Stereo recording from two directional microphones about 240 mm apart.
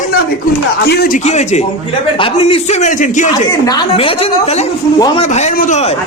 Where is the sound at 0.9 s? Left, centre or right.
Left.